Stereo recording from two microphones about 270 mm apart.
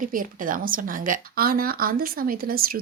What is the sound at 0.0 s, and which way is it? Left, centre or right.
Speech, right.